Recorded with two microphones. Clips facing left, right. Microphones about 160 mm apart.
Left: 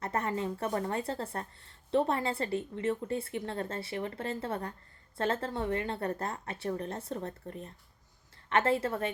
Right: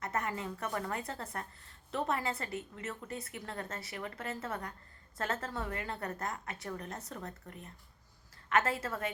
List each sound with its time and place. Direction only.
0.0 s speech: 30° left (ahead or behind)